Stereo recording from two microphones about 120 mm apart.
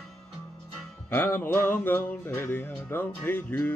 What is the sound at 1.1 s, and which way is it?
Music, 20° left (ahead or behind).